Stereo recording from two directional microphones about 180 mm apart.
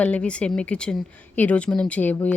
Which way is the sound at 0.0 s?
5° left (ahead or behind).